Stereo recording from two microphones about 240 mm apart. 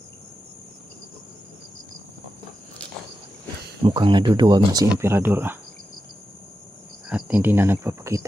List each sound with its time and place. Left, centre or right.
3.8 s speech: centre
7.1 s speech: centre